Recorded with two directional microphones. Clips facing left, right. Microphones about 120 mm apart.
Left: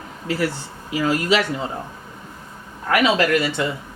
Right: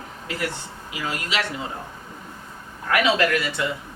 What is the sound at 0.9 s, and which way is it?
Speech, 35° left (ahead or behind).